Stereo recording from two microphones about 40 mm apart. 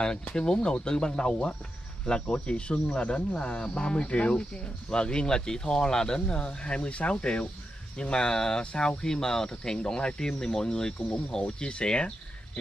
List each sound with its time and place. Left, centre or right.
0.0 s speech: left